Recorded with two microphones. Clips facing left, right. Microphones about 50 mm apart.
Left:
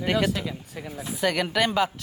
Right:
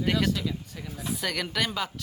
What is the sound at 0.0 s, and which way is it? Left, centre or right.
Speech, centre.